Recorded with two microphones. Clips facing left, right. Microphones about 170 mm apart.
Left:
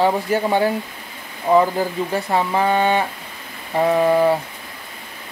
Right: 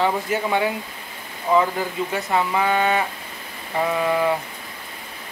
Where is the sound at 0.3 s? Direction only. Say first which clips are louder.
Left 4 dB; 35° left (ahead or behind).